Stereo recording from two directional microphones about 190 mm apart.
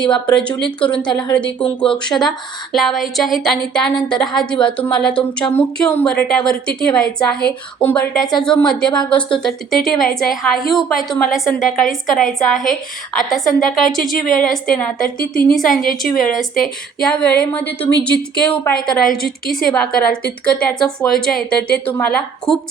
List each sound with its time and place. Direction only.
0.0 s speech: 25° left (ahead or behind)
0.3 s a woman's voice: 5° left (ahead or behind)